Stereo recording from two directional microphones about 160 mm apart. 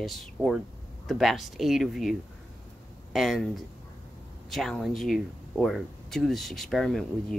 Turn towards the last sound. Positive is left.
turn(degrees=0)  # may be behind; listen again after turning